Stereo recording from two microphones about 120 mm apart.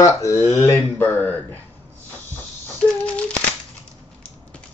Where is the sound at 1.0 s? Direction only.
15° left (ahead or behind).